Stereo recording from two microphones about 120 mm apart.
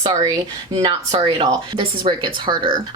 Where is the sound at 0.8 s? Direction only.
45° right (ahead or behind).